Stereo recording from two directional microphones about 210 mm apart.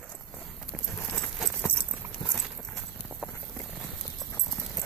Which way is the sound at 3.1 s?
5° right (ahead or behind).